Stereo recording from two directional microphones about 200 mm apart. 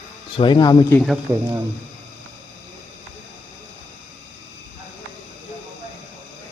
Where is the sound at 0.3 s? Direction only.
25° left (ahead or behind).